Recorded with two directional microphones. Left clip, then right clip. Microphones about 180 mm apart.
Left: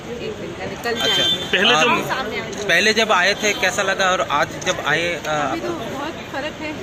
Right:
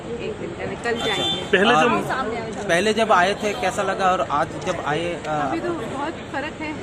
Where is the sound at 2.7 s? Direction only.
5° right (ahead or behind).